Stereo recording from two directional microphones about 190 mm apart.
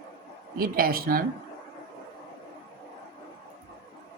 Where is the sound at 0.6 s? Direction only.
50° right (ahead or behind).